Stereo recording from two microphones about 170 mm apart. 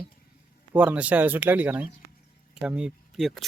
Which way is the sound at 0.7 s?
10° right (ahead or behind).